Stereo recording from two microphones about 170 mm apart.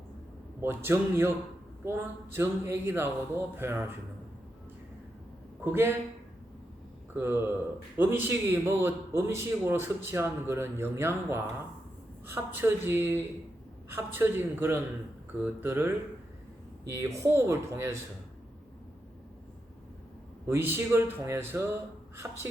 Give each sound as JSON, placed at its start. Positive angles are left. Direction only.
{"t": 0.6, "sound": "a man's voice", "side_deg": -15}
{"t": 7.1, "sound": "a man's voice", "side_deg": -15}
{"t": 20.5, "sound": "a man's voice", "side_deg": -15}